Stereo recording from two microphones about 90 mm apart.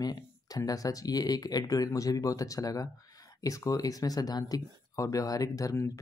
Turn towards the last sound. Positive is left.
turn(degrees=35)  # may be behind; listen again after turning